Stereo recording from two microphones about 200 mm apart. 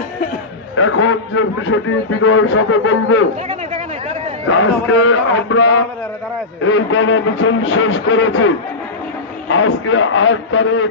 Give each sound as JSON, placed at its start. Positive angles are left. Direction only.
{"t": 0.8, "sound": "a man's voice", "side_deg": 80}
{"t": 4.4, "sound": "a man's voice", "side_deg": 90}